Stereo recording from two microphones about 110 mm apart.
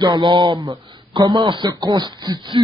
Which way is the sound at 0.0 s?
40° right (ahead or behind).